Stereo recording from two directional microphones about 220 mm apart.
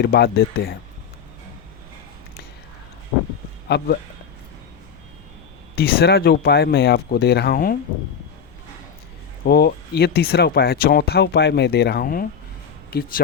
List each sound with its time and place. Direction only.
0.0 s speech: 50° left (ahead or behind)
3.7 s speech: 50° left (ahead or behind)
5.7 s speech: 45° left (ahead or behind)
9.4 s speech: 45° left (ahead or behind)